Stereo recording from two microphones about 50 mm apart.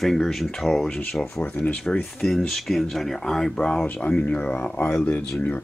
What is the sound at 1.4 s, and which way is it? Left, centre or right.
Speech, left.